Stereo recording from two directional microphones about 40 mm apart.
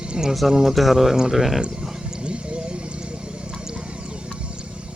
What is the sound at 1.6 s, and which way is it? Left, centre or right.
Speech, right.